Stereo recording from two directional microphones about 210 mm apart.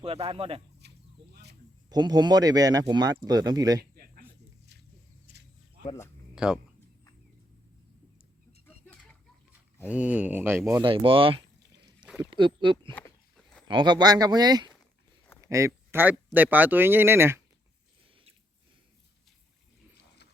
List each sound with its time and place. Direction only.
0.0 s speech: 25° right (ahead or behind)
0.8 s a sound: 50° right (ahead or behind)
1.9 s speech: 20° right (ahead or behind)
3.9 s snake: 45° right (ahead or behind)
6.3 s speech: 5° right (ahead or behind)
9.9 s speech: 5° right (ahead or behind)
10.8 s speech: 25° right (ahead or behind)
12.0 s a sound: 5° right (ahead or behind)
12.3 s speech: 25° right (ahead or behind)
12.9 s walk: 10° left (ahead or behind)
13.7 s speech: 20° right (ahead or behind)